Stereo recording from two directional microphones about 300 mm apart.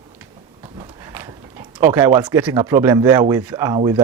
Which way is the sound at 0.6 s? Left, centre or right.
Centre.